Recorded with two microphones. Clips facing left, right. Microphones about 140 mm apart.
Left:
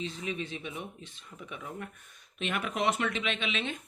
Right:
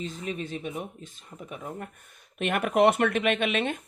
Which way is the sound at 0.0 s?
45° right (ahead or behind).